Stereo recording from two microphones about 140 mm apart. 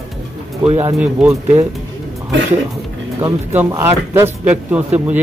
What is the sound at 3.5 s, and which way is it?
Speech, 15° right (ahead or behind).